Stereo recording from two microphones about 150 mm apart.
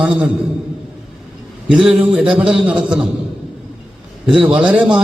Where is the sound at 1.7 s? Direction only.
5° right (ahead or behind).